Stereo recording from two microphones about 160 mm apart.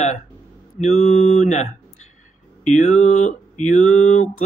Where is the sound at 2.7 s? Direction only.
50° left (ahead or behind).